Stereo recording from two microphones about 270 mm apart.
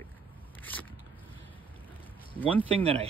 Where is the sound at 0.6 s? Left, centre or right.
Centre.